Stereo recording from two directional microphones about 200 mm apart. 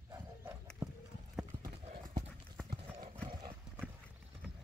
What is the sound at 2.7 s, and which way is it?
Clip-clop, 35° right (ahead or behind).